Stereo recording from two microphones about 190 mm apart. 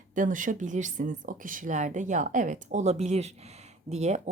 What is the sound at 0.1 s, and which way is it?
A woman's voice, 40° right (ahead or behind).